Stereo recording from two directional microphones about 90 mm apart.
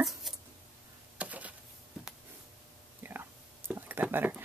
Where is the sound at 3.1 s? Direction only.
25° right (ahead or behind).